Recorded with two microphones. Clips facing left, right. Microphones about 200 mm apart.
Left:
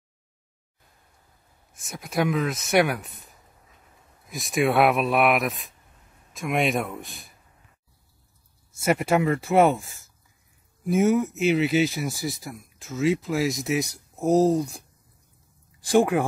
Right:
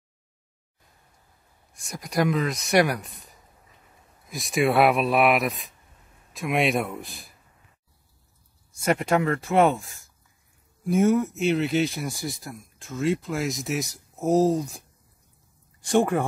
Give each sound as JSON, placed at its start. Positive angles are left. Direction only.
{"t": 1.7, "sound": "speech", "side_deg": 5}
{"t": 4.3, "sound": "speech", "side_deg": 0}
{"t": 8.7, "sound": "speech", "side_deg": 5}
{"t": 15.8, "sound": "speech", "side_deg": 0}